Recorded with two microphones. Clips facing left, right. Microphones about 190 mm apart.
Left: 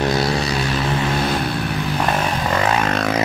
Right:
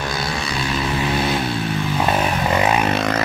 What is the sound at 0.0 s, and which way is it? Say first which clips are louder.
Vehicle: left 6 dB; 35° left (ahead or behind).